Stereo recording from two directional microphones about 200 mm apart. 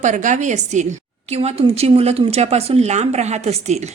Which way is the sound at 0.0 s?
40° right (ahead or behind).